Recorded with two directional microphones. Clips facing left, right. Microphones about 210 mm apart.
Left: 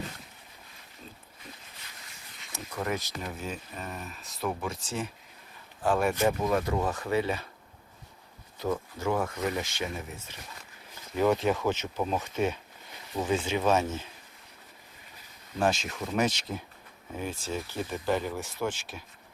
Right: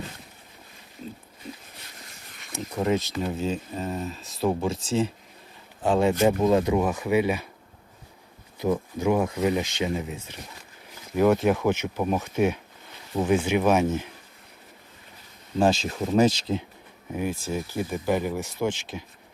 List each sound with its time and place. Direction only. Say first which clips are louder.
2.7 s speech: right 8 dB; 20° right (ahead or behind)
8.5 s speech: right 6 dB; 15° right (ahead or behind)
15.5 s speech: right 6 dB; 30° right (ahead or behind)
17.1 s speech: right 6 dB; 15° right (ahead or behind)